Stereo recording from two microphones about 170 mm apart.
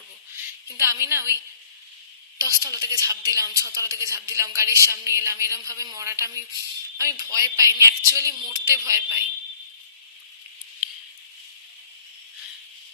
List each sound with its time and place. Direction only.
0.8 s a woman's voice: 15° right (ahead or behind)
2.4 s a woman's voice: 20° right (ahead or behind)